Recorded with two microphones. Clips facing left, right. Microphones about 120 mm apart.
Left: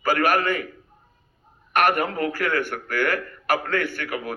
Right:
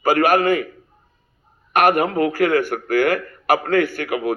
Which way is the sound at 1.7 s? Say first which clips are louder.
Right 5 dB; 45° right (ahead or behind).